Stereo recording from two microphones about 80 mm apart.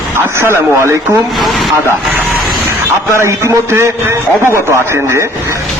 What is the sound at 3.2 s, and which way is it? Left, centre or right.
A man's voice, right.